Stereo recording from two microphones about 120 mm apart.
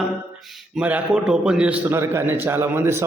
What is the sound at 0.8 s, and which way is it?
A man's voice, 10° right (ahead or behind).